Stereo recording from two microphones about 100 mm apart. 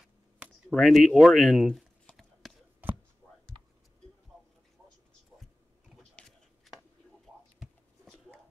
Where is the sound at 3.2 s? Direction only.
5° right (ahead or behind).